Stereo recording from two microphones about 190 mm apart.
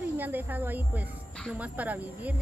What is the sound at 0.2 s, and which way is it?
Speech, 10° right (ahead or behind).